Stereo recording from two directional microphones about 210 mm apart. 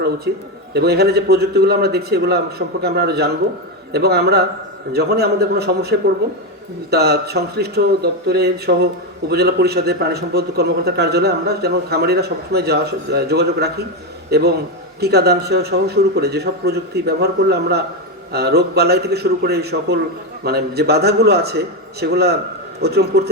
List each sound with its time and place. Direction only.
0.3 s a man's voice: 55° right (ahead or behind)